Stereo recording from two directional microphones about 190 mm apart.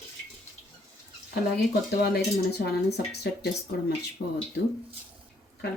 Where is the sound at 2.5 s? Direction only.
60° left (ahead or behind).